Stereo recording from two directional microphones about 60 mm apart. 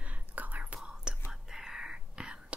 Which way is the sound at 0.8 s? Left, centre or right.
Centre.